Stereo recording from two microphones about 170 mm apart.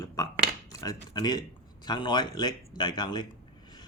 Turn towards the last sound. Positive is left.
turn(degrees=25)  # may be behind; listen again after turning